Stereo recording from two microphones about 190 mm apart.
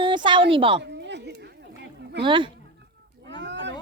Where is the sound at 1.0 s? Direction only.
65° right (ahead or behind).